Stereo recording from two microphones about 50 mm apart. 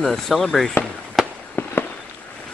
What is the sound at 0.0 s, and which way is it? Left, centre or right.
Speech, centre.